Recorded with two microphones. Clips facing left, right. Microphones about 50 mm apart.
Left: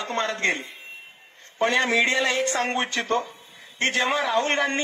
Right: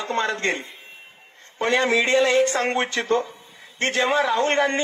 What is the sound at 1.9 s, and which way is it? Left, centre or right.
Speech, left.